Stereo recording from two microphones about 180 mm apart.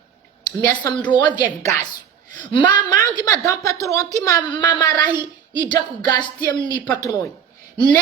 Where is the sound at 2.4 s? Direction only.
25° left (ahead or behind).